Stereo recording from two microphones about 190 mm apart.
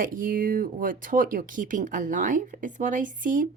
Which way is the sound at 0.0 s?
45° right (ahead or behind).